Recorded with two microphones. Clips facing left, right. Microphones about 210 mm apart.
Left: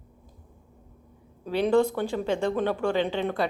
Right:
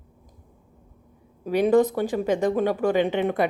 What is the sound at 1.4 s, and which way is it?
A woman's voice, 15° right (ahead or behind).